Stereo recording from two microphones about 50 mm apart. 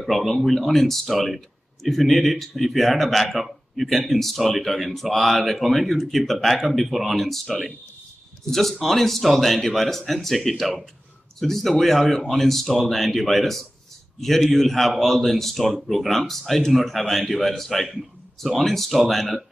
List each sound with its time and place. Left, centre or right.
0.0 s speech: centre